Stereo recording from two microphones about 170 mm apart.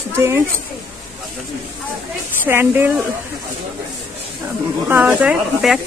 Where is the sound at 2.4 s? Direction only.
10° right (ahead or behind).